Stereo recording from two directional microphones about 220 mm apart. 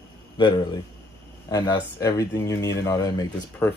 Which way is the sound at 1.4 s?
15° left (ahead or behind).